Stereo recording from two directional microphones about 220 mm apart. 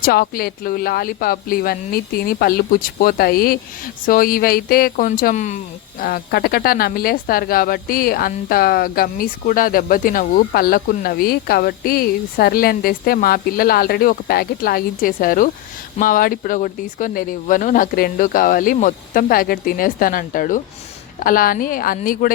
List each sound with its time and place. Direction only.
0.0 s speech: 45° left (ahead or behind)